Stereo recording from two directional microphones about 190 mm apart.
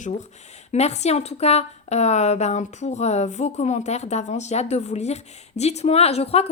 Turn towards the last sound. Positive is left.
turn(degrees=30)  # may be behind; listen again after turning